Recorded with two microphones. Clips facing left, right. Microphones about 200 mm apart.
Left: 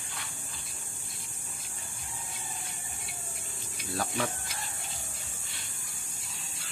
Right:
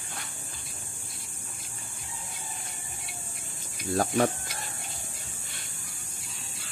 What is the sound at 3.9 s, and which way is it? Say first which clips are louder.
Speech: right 8 dB; 45° right (ahead or behind).